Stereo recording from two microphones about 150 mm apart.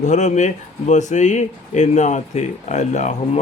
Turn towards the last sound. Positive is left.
turn(degrees=50)  # may be behind; listen again after turning